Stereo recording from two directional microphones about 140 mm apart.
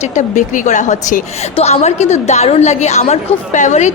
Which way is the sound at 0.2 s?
60° left (ahead or behind).